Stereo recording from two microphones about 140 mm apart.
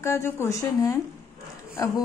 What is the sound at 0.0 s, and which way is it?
Speech, 20° left (ahead or behind).